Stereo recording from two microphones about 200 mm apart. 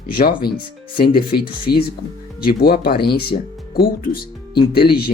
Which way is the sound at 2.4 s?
50° left (ahead or behind).